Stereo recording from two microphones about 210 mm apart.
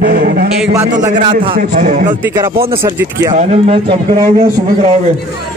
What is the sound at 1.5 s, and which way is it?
Speech, 40° right (ahead or behind).